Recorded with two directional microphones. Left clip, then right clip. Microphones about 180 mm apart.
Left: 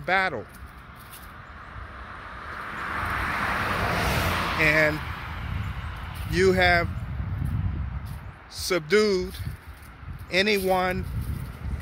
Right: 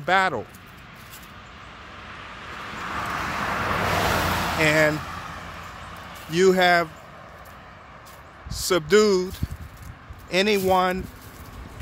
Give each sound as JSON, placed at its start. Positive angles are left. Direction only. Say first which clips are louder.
{"t": 0.0, "sound": "speech", "louder": "right 3 dB", "side_deg": -15}
{"t": 2.0, "sound": "vehicle", "louder": "even", "side_deg": 20}
{"t": 4.2, "sound": "a sound", "louder": "right 2 dB", "side_deg": -55}
{"t": 4.6, "sound": "speech", "louder": "right 1 dB", "side_deg": -15}
{"t": 4.9, "sound": "vehicle", "louder": "right 2 dB", "side_deg": -50}
{"t": 6.3, "sound": "speech", "louder": "right 3 dB", "side_deg": -10}
{"t": 8.5, "sound": "speech", "louder": "right 3 dB", "side_deg": -15}
{"t": 10.3, "sound": "speech", "louder": "right 2 dB", "side_deg": -10}